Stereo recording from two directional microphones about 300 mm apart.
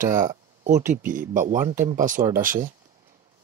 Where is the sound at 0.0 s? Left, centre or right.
Right.